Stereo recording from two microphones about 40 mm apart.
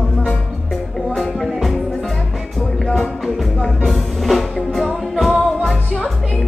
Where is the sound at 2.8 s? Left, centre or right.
Centre.